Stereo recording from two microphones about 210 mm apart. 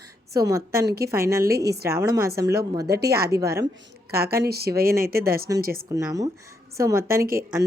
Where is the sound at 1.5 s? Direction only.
50° right (ahead or behind).